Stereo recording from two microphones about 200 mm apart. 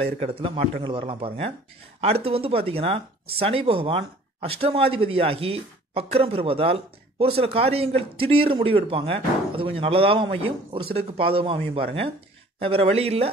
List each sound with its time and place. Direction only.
0.0 s speech: 30° right (ahead or behind)